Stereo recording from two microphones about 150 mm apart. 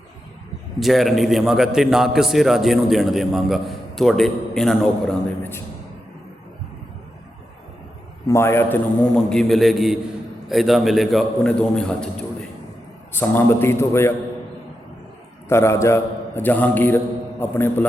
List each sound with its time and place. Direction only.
0.8 s a man's voice: centre (ahead or behind)
8.3 s a man's voice: 15° left (ahead or behind)
13.1 s a man's voice: 15° left (ahead or behind)
15.4 s a man's voice: 15° left (ahead or behind)